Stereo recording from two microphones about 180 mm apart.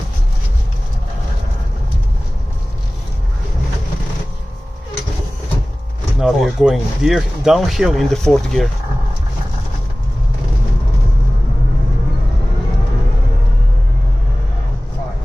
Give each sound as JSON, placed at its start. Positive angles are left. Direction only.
{"t": 6.1, "sound": "speech", "side_deg": -5}